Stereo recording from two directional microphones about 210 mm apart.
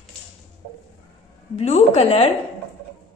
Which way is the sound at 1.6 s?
30° left (ahead or behind).